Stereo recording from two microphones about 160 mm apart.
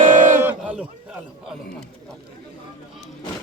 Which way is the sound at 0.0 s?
55° right (ahead or behind).